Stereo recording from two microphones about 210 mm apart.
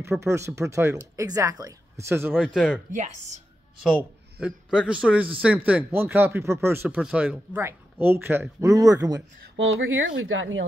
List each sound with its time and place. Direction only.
0.1 s a man's voice: centre (ahead or behind)
0.6 s speech: 15° right (ahead or behind)
2.4 s a man's voice: 5° left (ahead or behind)
2.9 s speech: 35° right (ahead or behind)
4.4 s a man's voice: 5° right (ahead or behind)
9.6 s speech: 70° right (ahead or behind)